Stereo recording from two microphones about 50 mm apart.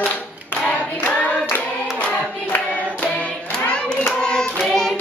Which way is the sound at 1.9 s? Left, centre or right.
Left.